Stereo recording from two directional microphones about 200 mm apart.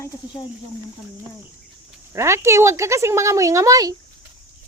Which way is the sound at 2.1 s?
15° right (ahead or behind).